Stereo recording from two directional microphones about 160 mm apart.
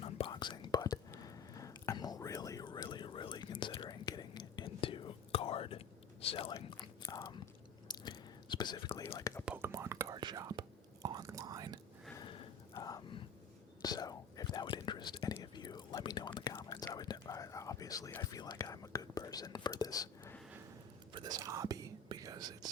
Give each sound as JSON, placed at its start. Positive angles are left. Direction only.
{"t": 0.0, "sound": "whispering", "side_deg": 30}
{"t": 6.2, "sound": "speech", "side_deg": 35}
{"t": 6.5, "sound": "whispering", "side_deg": 30}
{"t": 9.5, "sound": "whispering", "side_deg": -15}
{"t": 12.7, "sound": "whispering", "side_deg": 20}
{"t": 21.1, "sound": "whispering", "side_deg": -25}